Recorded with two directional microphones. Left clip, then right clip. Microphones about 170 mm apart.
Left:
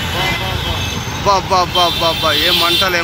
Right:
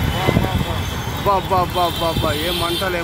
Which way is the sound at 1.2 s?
5° right (ahead or behind).